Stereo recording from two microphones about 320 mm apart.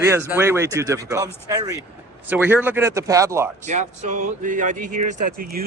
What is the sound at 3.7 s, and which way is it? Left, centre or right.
Speech, right.